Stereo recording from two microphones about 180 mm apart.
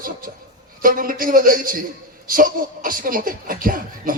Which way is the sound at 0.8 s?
50° right (ahead or behind).